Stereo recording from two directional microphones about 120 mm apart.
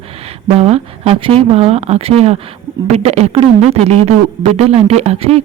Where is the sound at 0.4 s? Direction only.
60° right (ahead or behind).